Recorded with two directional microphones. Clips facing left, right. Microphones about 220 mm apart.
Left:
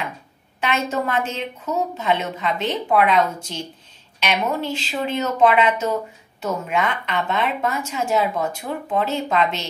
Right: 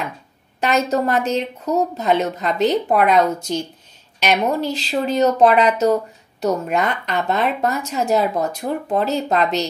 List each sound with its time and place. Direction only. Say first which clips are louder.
0.6 s a woman's voice: right 4 dB; 40° right (ahead or behind)